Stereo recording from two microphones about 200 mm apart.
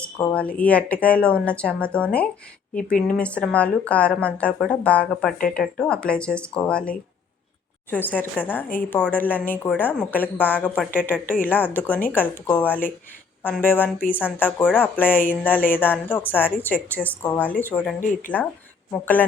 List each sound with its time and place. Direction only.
0.0 s speech: 10° left (ahead or behind)